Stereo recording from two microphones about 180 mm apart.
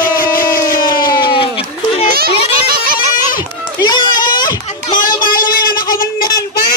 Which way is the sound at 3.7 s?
25° left (ahead or behind).